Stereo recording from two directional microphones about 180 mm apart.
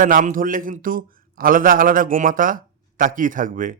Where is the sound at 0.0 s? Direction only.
45° right (ahead or behind).